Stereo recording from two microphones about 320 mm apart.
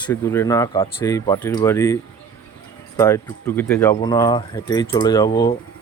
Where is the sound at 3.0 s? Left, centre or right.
Centre.